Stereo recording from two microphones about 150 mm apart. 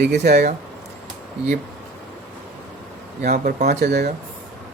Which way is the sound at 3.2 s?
55° right (ahead or behind).